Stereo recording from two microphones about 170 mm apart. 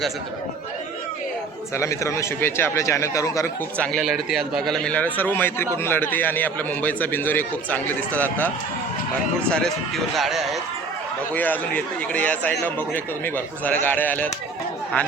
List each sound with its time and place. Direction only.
1.7 s a man's voice: 15° left (ahead or behind)
3.9 s a man's voice: centre (ahead or behind)
11.3 s a man's voice: 10° left (ahead or behind)